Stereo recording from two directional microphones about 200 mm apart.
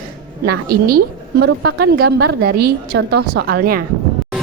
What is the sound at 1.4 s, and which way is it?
A woman's voice, 50° right (ahead or behind).